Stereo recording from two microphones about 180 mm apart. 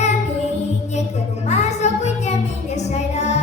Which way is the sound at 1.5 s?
40° left (ahead or behind).